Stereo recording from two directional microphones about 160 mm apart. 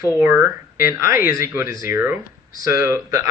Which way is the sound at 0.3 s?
10° right (ahead or behind).